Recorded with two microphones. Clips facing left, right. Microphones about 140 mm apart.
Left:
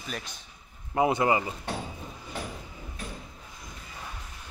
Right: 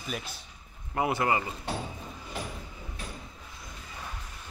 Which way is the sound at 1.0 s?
20° left (ahead or behind).